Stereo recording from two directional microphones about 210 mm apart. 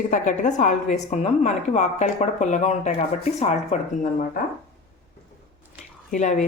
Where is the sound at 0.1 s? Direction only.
35° left (ahead or behind).